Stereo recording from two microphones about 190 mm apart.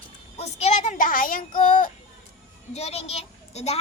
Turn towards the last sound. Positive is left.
turn(degrees=35)  # may be behind; listen again after turning